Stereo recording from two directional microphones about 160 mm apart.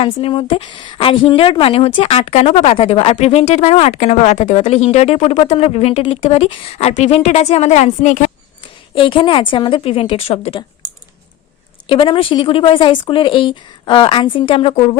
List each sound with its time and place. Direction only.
0.0 s a woman's voice: 35° left (ahead or behind); by 8.3 s 50° left (ahead or behind)
9.0 s a woman's voice: 35° left (ahead or behind)
11.9 s a woman's voice: 30° left (ahead or behind)